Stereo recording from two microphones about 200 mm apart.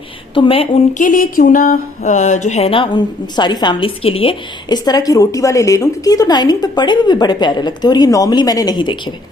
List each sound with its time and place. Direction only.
0.3 s speech: 25° left (ahead or behind)
0.9 s speech: 40° left (ahead or behind); by 9.1 s 25° left (ahead or behind)